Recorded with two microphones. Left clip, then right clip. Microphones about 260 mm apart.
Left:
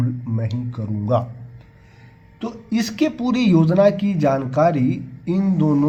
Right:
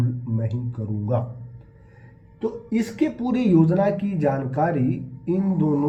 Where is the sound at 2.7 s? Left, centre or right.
Left.